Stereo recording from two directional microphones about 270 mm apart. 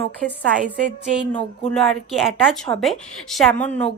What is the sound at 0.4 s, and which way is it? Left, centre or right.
Speech, right.